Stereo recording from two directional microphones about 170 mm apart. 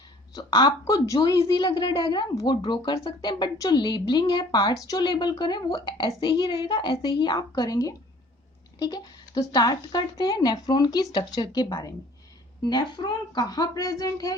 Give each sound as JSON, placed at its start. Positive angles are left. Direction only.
{"t": 0.3, "sound": "a woman's voice", "side_deg": 25}